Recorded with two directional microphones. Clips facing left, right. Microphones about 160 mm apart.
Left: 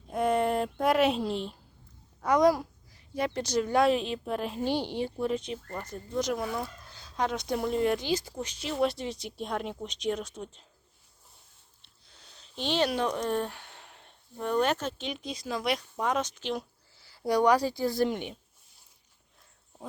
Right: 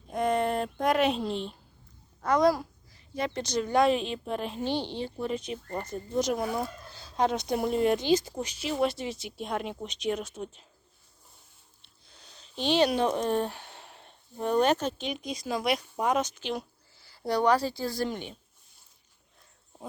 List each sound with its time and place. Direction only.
0.1 s a sound: 5° left (ahead or behind)
2.2 s a child's voice: 15° left (ahead or behind)
5.7 s speech: 20° right (ahead or behind)
6.9 s speech: 30° right (ahead or behind); by 10.7 s 5° right (ahead or behind)
12.4 s speech: 15° right (ahead or behind); by 18.3 s 20° left (ahead or behind)